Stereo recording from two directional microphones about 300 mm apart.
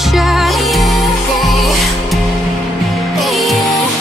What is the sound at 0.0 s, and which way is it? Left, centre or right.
Music, centre.